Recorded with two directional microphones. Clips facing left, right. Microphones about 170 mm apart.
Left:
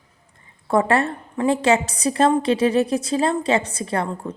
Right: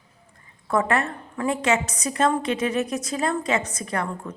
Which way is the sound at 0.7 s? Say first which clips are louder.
Left 4 dB; 30° left (ahead or behind).